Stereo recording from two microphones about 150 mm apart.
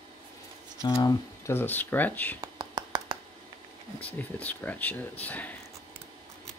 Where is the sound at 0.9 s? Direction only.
25° left (ahead or behind).